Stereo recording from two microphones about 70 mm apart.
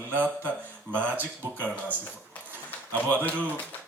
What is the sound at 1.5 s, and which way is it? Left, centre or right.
Speech, centre.